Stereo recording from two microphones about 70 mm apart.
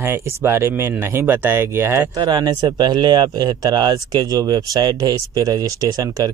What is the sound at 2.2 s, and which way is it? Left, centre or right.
Speech, right.